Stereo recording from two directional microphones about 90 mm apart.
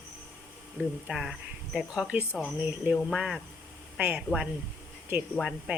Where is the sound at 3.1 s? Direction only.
5° right (ahead or behind).